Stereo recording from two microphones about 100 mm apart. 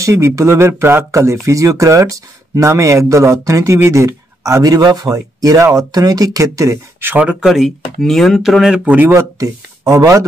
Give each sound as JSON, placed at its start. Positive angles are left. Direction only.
{"t": 0.0, "sound": "speech", "side_deg": -30}
{"t": 7.2, "sound": "speech", "side_deg": -5}
{"t": 8.8, "sound": "speech", "side_deg": -20}
{"t": 9.1, "sound": "speech", "side_deg": -30}